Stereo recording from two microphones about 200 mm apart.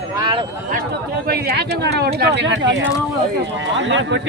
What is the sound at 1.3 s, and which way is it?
Speech, 50° right (ahead or behind).